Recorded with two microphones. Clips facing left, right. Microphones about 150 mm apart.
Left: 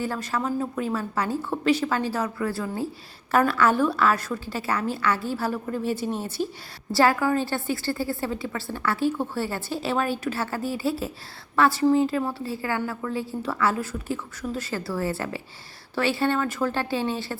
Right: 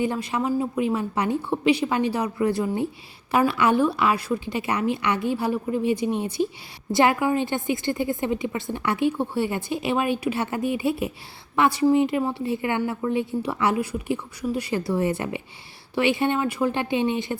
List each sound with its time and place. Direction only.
0.0 s a woman's voice: 15° right (ahead or behind)